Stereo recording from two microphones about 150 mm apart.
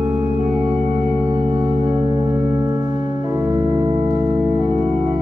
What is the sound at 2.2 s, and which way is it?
Music, 25° right (ahead or behind).